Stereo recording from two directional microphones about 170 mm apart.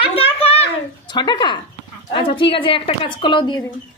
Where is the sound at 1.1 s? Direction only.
25° left (ahead or behind).